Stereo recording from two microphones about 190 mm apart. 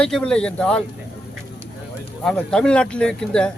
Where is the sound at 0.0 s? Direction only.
5° left (ahead or behind).